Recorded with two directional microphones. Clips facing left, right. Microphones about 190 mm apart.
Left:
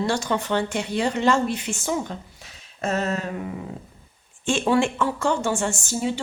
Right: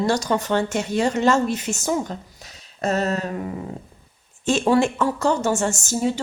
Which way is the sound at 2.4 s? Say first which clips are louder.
Right 3 dB; 35° right (ahead or behind).